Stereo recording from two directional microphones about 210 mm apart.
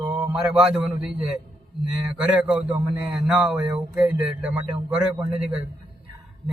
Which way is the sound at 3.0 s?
5° right (ahead or behind).